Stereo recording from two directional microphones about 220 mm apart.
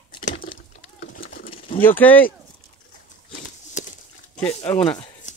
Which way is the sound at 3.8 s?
30° left (ahead or behind).